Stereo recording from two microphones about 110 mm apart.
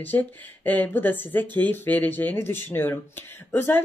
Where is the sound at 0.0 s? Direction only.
15° left (ahead or behind).